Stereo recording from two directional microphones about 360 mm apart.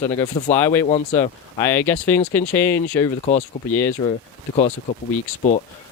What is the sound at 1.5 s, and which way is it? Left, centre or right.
Speech, centre.